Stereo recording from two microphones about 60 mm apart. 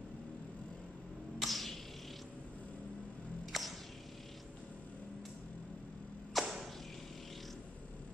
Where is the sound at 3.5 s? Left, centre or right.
Centre.